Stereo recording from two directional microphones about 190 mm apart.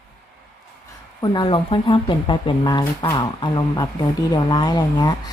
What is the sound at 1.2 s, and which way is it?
A woman's voice, 25° left (ahead or behind).